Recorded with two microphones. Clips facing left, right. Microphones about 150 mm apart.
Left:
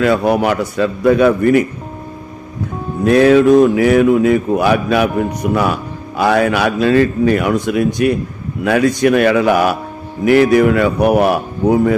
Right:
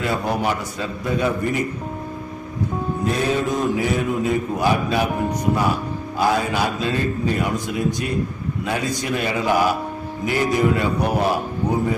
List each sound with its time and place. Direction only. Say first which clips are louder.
0.0 s speech: left 9 dB; 70° left (ahead or behind)
3.0 s speech: left 14 dB; 75° left (ahead or behind)